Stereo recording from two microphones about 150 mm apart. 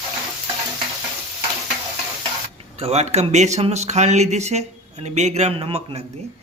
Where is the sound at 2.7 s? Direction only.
45° right (ahead or behind).